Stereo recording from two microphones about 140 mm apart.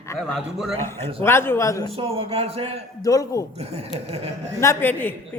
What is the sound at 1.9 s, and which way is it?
Speech, 45° right (ahead or behind).